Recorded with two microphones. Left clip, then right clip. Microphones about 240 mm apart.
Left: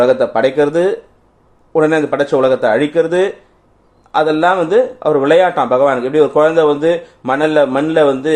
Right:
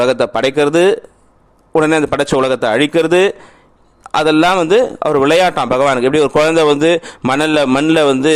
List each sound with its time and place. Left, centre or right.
0.0 s a man's voice: right